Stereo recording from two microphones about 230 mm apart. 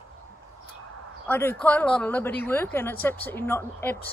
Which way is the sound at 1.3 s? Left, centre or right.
Centre.